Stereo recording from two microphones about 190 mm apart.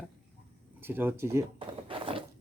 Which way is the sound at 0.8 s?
10° right (ahead or behind).